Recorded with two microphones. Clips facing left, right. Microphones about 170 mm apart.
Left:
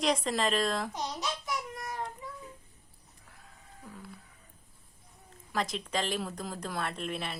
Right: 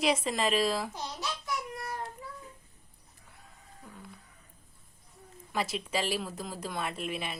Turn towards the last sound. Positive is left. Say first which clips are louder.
# even
turn(degrees=-5)  # may be behind; listen again after turning